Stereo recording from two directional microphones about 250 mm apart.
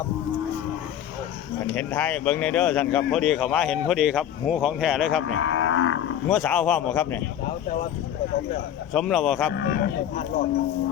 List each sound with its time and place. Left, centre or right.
1.7 s speech: centre
5.3 s livestock: left
6.2 s speech: centre
8.9 s speech: centre
9.6 s speech: left